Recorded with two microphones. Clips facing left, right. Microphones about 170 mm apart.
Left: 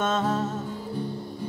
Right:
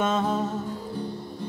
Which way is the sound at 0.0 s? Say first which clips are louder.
Right 1 dB; 10° right (ahead or behind).